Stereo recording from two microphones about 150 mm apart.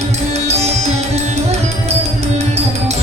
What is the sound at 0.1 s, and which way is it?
Music, 45° right (ahead or behind).